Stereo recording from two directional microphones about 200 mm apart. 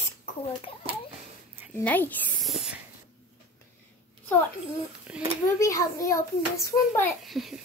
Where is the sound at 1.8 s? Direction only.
10° left (ahead or behind).